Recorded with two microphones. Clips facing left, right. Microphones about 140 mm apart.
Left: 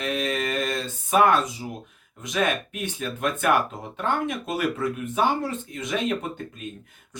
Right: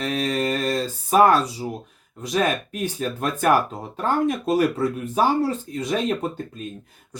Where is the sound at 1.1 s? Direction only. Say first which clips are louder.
Right 3 dB; 35° right (ahead or behind).